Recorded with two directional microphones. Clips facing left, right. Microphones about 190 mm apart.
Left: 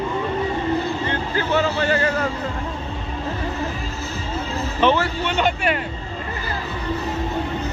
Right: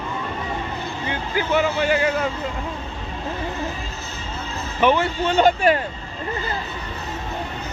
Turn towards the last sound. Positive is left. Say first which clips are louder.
# right 4 dB
turn(degrees=-35)  # may be behind; listen again after turning